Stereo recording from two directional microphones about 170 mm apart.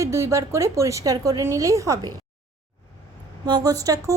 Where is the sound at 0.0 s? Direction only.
15° right (ahead or behind).